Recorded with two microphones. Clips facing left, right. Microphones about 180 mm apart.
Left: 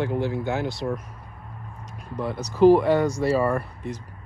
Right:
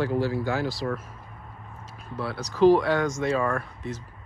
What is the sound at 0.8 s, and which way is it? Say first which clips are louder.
Speech: left 1 dB; 5° left (ahead or behind).